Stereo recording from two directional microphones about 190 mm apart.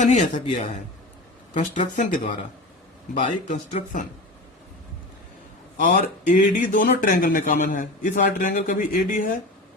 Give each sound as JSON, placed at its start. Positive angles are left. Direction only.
{"t": 0.0, "sound": "speech", "side_deg": 40}
{"t": 3.5, "sound": "speech", "side_deg": 35}
{"t": 5.8, "sound": "speech", "side_deg": 45}